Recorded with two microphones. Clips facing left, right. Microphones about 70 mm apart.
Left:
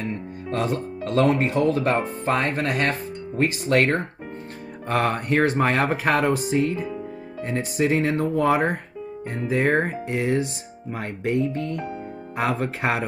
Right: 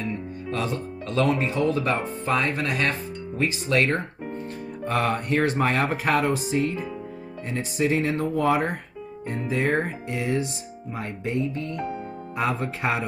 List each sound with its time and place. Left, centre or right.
0.0 s speech: left
4.8 s speech: left